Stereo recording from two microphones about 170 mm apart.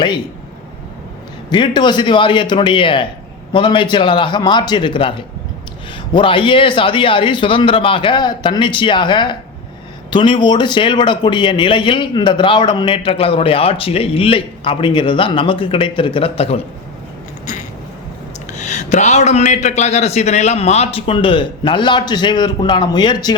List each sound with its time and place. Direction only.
1.5 s speech: 25° left (ahead or behind)
18.5 s a man's voice: 45° left (ahead or behind); by 23.3 s 25° left (ahead or behind)